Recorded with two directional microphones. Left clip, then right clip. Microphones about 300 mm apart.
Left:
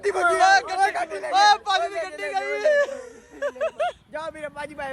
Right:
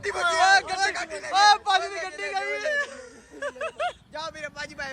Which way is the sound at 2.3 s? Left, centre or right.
Centre.